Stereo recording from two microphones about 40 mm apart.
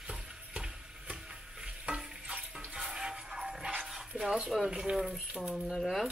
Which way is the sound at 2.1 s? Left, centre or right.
Right.